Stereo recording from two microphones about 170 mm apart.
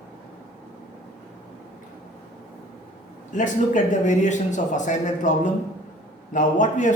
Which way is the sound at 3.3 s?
45° left (ahead or behind).